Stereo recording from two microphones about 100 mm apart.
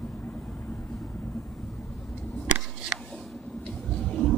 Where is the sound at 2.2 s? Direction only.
10° left (ahead or behind).